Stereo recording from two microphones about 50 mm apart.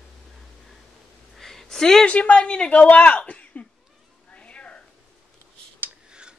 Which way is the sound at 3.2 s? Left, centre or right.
Left.